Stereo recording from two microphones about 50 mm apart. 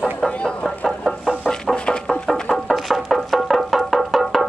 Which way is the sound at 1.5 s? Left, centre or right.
Centre.